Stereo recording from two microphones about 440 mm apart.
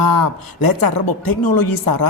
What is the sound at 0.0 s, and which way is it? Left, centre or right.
Speech, left.